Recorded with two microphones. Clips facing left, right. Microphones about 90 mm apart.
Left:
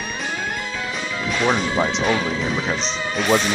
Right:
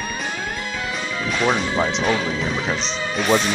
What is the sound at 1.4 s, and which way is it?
Speech, centre (ahead or behind).